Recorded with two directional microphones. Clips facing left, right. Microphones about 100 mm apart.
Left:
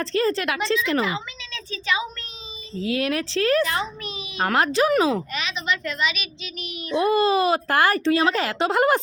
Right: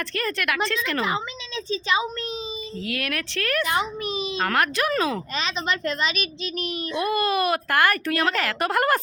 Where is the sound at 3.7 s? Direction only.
20° right (ahead or behind).